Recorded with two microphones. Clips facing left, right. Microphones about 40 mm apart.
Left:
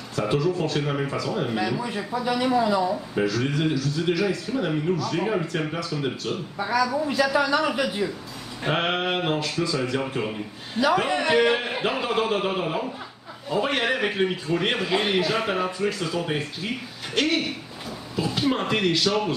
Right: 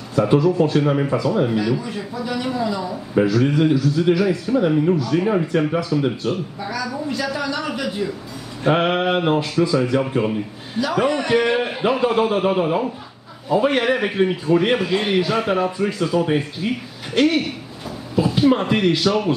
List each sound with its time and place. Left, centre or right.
0.1 s speech: centre
1.5 s a man's voice: centre
5.1 s speech: centre
6.6 s a man's voice: centre
8.6 s speech: centre
11.0 s speech: centre